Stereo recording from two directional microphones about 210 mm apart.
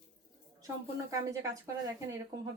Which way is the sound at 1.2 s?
15° right (ahead or behind).